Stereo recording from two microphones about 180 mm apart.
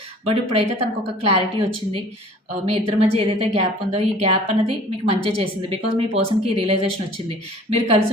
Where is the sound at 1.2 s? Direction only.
30° right (ahead or behind).